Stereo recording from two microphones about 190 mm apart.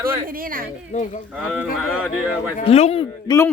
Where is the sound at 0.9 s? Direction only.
35° left (ahead or behind).